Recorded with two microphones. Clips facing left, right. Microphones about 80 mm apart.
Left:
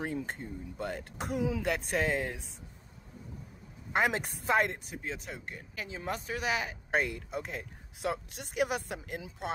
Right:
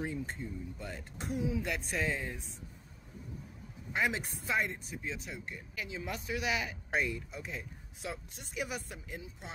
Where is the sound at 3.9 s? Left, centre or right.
Left.